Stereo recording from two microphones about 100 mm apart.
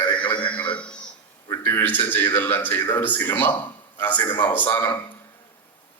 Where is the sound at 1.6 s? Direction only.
20° left (ahead or behind).